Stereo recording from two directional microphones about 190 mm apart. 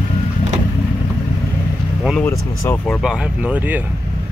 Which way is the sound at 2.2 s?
15° left (ahead or behind).